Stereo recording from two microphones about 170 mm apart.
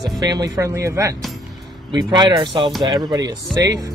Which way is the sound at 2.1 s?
25° right (ahead or behind).